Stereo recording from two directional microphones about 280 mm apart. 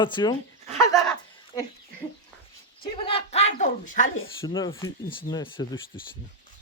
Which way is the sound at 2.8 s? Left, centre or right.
Centre.